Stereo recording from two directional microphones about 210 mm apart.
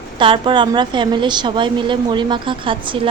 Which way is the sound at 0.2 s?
25° right (ahead or behind).